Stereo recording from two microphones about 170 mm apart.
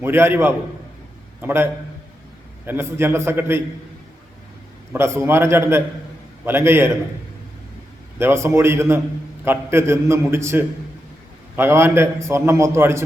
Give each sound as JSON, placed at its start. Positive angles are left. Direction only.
{"t": 0.0, "sound": "a man's voice", "side_deg": -15}
{"t": 2.6, "sound": "a man's voice", "side_deg": -15}
{"t": 4.9, "sound": "a man's voice", "side_deg": -15}
{"t": 8.2, "sound": "a man's voice", "side_deg": -15}